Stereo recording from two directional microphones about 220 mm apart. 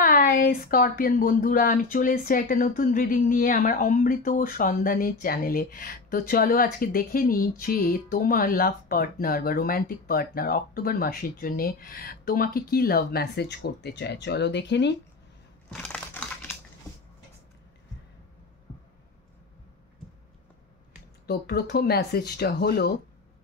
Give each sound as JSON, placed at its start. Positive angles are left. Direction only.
{"t": 0.0, "sound": "speech", "side_deg": 40}
{"t": 15.7, "sound": "typing", "side_deg": 5}
{"t": 21.3, "sound": "speech", "side_deg": 45}